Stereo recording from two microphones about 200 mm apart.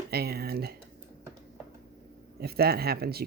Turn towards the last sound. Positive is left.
turn(degrees=-50)  # may be behind; listen again after turning